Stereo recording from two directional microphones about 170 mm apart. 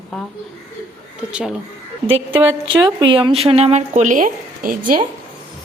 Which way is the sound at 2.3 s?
10° right (ahead or behind).